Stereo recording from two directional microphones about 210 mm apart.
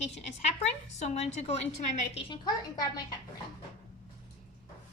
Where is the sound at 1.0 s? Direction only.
30° left (ahead or behind).